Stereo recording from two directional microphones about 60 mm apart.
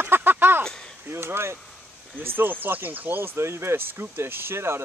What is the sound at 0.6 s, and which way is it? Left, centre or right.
Chop, centre.